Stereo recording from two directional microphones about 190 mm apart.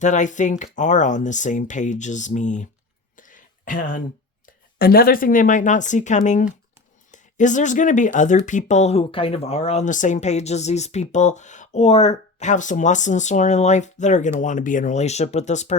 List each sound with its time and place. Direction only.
0.0 s speech: 40° left (ahead or behind)
3.2 s a sound: 45° left (ahead or behind)
4.8 s speech: 50° left (ahead or behind)